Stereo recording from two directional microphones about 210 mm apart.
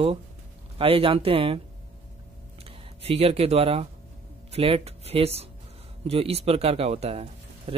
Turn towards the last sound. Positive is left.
turn(degrees=-30)  # may be behind; listen again after turning